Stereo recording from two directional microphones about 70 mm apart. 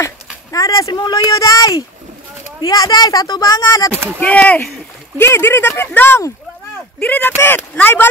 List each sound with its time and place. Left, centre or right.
0.0 s speech: left
4.2 s speech: left
5.2 s speech: left